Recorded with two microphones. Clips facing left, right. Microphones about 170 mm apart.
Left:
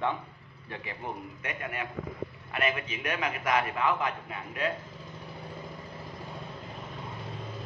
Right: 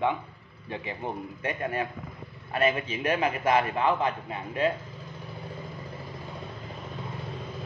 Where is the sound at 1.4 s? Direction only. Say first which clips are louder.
Right 7 dB; 35° right (ahead or behind).